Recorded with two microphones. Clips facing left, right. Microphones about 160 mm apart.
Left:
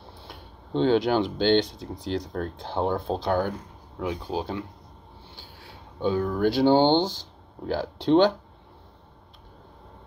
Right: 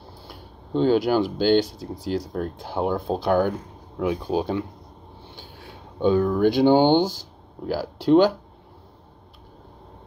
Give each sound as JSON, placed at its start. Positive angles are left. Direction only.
{"t": 0.2, "sound": "speech", "side_deg": -5}